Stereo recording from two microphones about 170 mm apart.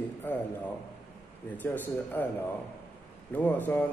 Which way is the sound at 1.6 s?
10° left (ahead or behind).